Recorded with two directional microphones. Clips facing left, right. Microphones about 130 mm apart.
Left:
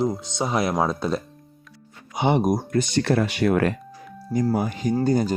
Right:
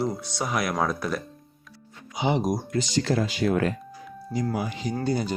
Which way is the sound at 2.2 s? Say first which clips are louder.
Left 4 dB; 55° left (ahead or behind).